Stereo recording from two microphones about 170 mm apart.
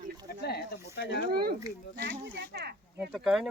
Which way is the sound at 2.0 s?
80° right.